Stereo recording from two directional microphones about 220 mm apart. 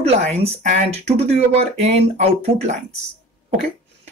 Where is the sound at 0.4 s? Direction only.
30° right (ahead or behind).